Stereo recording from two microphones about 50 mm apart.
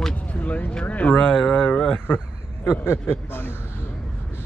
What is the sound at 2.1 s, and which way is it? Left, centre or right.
A man's voice, left.